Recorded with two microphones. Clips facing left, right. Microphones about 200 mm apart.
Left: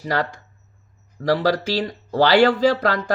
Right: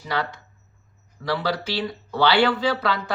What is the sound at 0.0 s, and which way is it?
A man's voice, 45° left (ahead or behind).